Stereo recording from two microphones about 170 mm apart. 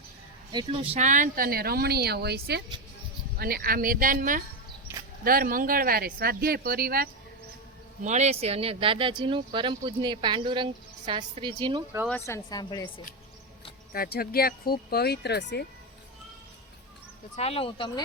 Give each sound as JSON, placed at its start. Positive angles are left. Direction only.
{"t": 0.5, "sound": "speech", "side_deg": -30}
{"t": 4.9, "sound": "a sound", "side_deg": -10}
{"t": 5.2, "sound": "speech", "side_deg": -55}
{"t": 8.0, "sound": "speech", "side_deg": -40}
{"t": 12.0, "sound": "speech", "side_deg": 10}
{"t": 13.9, "sound": "speech", "side_deg": 60}
{"t": 17.3, "sound": "speech", "side_deg": 35}